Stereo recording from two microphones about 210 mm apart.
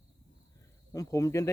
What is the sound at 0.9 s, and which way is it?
Speech, 15° left (ahead or behind).